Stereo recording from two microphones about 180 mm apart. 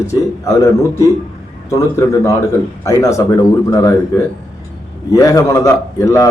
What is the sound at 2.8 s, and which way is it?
A man's voice, 15° left (ahead or behind).